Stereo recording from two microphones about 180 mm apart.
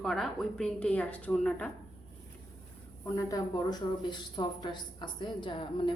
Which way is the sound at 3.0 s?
20° left (ahead or behind).